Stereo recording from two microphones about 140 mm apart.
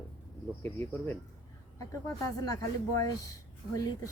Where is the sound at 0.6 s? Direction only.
15° left (ahead or behind).